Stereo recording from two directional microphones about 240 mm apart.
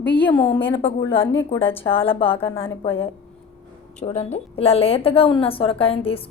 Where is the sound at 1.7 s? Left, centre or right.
Left.